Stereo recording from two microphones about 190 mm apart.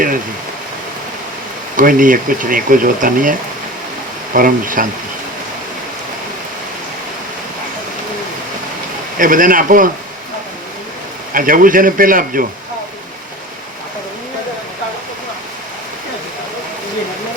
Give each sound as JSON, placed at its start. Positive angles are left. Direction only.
{"t": 1.7, "sound": "speech", "side_deg": -45}
{"t": 4.4, "sound": "speech", "side_deg": -45}
{"t": 9.1, "sound": "speech", "side_deg": -45}
{"t": 11.3, "sound": "speech", "side_deg": -45}